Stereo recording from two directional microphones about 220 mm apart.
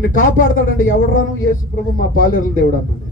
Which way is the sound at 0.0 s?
35° left (ahead or behind).